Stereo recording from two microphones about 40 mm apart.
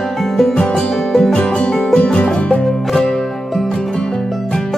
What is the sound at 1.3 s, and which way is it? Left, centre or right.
Music, left.